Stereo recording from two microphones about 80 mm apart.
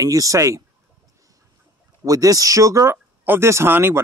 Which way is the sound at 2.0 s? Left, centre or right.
Right.